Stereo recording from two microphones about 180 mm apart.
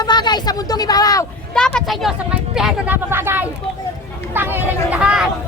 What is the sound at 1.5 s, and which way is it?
Speech, 5° left (ahead or behind).